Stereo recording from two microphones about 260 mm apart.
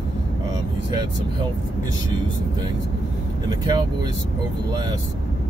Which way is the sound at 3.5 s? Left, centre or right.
Centre.